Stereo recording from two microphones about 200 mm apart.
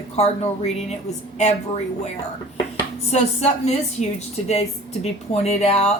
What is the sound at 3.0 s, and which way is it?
A woman's voice, 35° left (ahead or behind).